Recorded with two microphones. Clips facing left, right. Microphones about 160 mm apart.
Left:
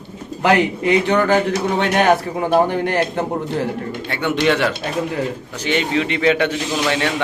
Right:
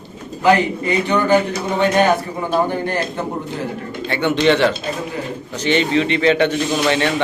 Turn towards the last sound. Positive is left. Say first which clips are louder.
# right 3 dB
turn(degrees=5)  # may be behind; listen again after turning